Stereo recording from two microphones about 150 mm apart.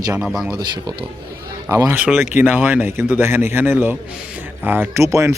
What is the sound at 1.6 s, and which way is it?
Speech, 15° right (ahead or behind).